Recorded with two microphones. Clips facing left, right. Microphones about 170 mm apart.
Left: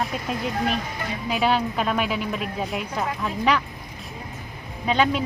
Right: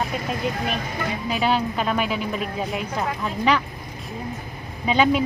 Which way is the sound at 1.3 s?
Centre (ahead or behind).